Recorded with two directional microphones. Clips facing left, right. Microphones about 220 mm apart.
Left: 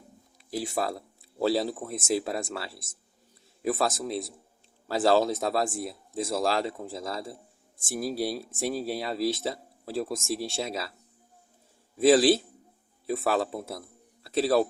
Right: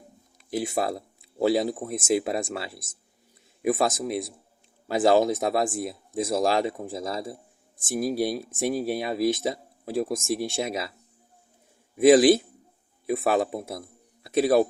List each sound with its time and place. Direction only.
0.5 s speech: 20° right (ahead or behind)
11.9 s a man's voice: 15° right (ahead or behind)